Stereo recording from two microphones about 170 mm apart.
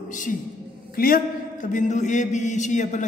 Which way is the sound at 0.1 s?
50° left (ahead or behind).